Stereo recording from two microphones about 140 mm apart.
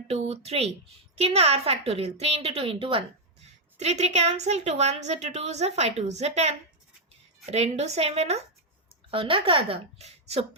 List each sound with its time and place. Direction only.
0.1 s a woman's voice: 45° right (ahead or behind)
3.8 s a woman's voice: 50° right (ahead or behind)